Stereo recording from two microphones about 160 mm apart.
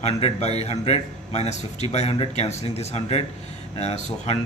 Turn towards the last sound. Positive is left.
turn(degrees=40)  # may be behind; listen again after turning